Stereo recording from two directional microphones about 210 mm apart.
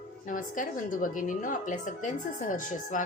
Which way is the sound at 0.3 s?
40° left (ahead or behind).